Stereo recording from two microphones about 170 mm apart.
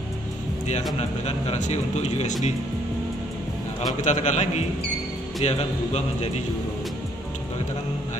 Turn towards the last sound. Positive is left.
turn(degrees=40)  # may be behind; listen again after turning